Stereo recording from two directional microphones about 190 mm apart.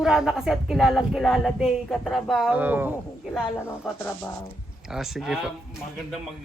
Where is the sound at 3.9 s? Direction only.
10° left (ahead or behind).